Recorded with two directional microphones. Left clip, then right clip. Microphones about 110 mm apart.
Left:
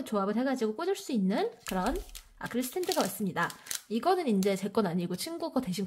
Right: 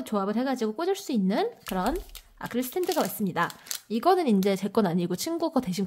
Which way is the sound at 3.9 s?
40° right (ahead or behind).